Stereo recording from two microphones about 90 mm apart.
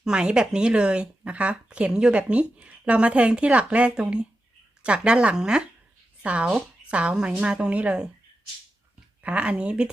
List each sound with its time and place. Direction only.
0.0 s speech: 10° right (ahead or behind)
9.2 s speech: 15° right (ahead or behind)